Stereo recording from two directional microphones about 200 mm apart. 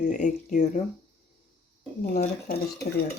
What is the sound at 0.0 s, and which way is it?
Speech, 40° left (ahead or behind).